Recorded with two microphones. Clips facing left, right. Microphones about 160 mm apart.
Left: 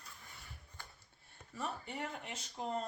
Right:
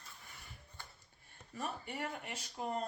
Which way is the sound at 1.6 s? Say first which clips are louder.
Even; 10° right (ahead or behind).